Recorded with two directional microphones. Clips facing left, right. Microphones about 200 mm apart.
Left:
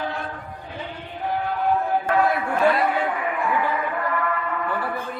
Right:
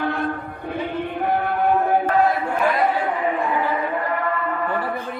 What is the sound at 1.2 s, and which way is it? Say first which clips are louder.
Chant: right 2 dB; 60° right (ahead or behind).